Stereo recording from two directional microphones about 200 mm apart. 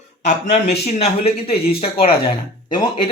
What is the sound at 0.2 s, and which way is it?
Speech, 35° left (ahead or behind).